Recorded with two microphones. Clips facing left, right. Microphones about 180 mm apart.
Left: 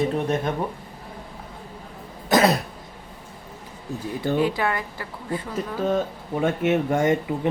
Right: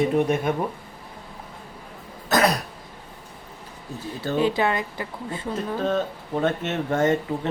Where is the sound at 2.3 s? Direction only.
25° left (ahead or behind).